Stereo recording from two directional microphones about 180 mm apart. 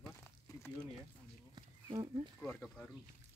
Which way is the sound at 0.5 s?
15° left (ahead or behind).